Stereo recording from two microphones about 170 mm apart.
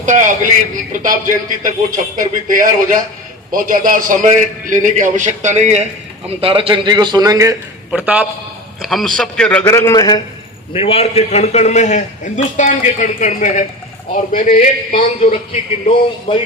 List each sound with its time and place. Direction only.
0.0 s a sound: 45° right (ahead or behind)
1.0 s a man's voice: 50° right (ahead or behind); by 7.5 s 20° right (ahead or behind)
7.9 s a man's voice: 10° right (ahead or behind); by 10.2 s 25° left (ahead or behind)
10.7 s a man's voice: 35° left (ahead or behind)
16.3 s speech: 30° left (ahead or behind)